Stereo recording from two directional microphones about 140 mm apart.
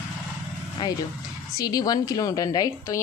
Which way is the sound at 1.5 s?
25° left (ahead or behind).